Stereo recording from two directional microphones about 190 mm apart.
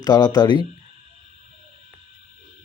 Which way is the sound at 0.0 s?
20° left (ahead or behind).